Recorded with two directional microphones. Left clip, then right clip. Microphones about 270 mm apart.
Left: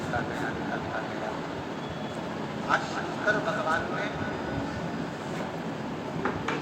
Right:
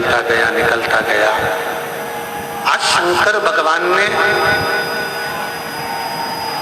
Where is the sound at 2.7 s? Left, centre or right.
Right.